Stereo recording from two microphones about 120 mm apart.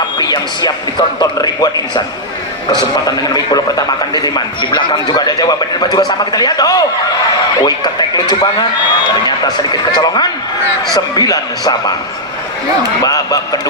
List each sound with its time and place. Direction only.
0.2 s a man's voice: 35° left (ahead or behind)
9.9 s a man's voice: 35° left (ahead or behind)
13.1 s a man's voice: 30° left (ahead or behind)